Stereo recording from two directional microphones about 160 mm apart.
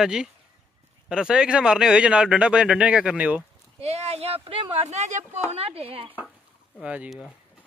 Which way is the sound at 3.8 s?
40° right (ahead or behind).